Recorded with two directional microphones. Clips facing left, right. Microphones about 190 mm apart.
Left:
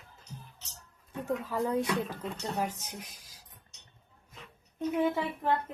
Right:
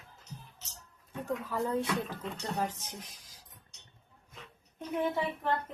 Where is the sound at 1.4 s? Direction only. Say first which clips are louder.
Left 2 dB; 15° left (ahead or behind).